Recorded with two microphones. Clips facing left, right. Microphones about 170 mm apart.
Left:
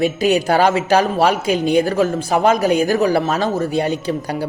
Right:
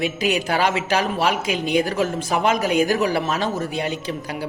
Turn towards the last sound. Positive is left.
turn(degrees=35)  # may be behind; listen again after turning